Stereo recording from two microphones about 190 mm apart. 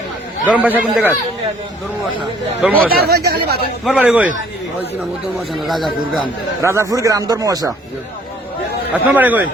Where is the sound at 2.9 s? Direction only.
55° right (ahead or behind).